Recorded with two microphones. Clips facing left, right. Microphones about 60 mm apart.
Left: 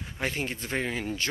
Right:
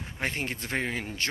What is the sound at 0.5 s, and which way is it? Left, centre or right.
Speech, right.